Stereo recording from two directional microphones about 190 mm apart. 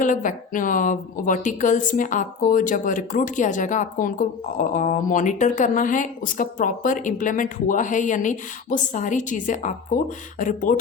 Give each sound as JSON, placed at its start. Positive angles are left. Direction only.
{"t": 0.0, "sound": "a woman's voice", "side_deg": 45}